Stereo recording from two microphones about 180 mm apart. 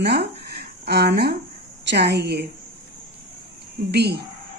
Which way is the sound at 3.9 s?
65° right (ahead or behind).